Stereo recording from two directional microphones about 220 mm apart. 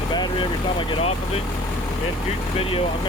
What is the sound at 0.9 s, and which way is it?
Speech, 25° left (ahead or behind).